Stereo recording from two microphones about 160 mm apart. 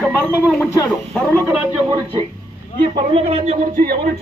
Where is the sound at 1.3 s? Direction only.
15° right (ahead or behind).